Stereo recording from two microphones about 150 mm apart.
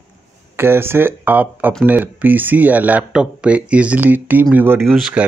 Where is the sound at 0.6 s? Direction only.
15° right (ahead or behind).